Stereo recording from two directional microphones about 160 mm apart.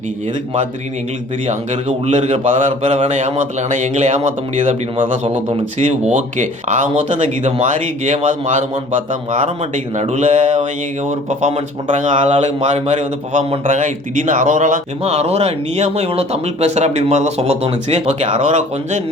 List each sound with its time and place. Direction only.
1.5 s speech: 45° right (ahead or behind)